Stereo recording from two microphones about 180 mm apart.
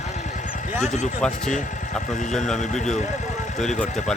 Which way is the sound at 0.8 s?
40° left (ahead or behind).